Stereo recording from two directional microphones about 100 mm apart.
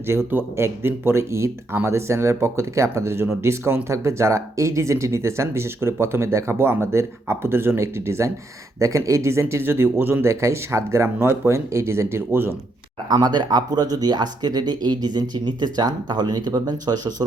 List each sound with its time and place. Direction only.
0.1 s speech: 25° right (ahead or behind)
13.1 s speech: 45° right (ahead or behind)